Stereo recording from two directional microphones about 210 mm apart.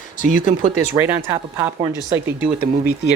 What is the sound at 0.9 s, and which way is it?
Speech, 10° right (ahead or behind).